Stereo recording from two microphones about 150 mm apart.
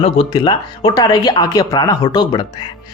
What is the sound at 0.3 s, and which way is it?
A man's voice, 25° left (ahead or behind).